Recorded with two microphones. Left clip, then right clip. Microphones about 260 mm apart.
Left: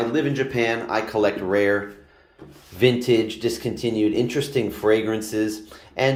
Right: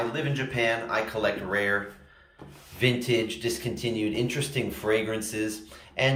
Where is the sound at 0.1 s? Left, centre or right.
Left.